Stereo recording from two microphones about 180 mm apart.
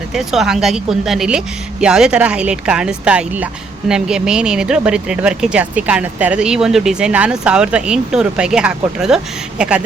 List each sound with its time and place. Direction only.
0.1 s speech: centre (ahead or behind)